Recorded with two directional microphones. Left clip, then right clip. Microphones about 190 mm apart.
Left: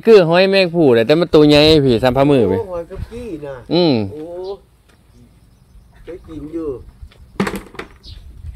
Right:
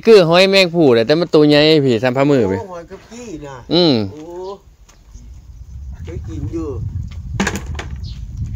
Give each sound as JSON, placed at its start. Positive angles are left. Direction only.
{"t": 0.0, "sound": "speech", "side_deg": -5}
{"t": 1.0, "sound": "a man's voice", "side_deg": 10}
{"t": 3.3, "sound": "speech", "side_deg": -45}
{"t": 3.6, "sound": "speech", "side_deg": 0}
{"t": 6.0, "sound": "speech", "side_deg": -50}
{"t": 7.3, "sound": "a sound", "side_deg": -20}